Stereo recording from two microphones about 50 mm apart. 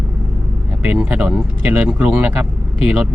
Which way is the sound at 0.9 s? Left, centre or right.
Centre.